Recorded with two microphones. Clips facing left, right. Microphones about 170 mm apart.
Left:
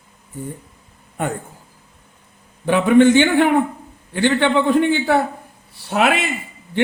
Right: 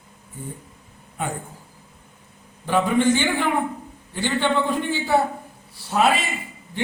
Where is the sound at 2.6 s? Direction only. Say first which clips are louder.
Left 7 dB; 65° left (ahead or behind).